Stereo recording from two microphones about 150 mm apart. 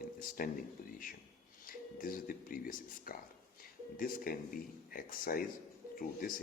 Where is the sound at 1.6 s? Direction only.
70° left (ahead or behind).